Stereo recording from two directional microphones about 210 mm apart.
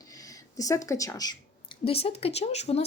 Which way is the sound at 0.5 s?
15° left (ahead or behind).